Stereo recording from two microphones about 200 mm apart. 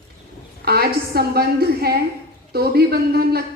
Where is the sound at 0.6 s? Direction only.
50° right (ahead or behind).